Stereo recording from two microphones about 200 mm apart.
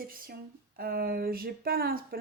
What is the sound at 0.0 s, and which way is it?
Speech, 45° right (ahead or behind).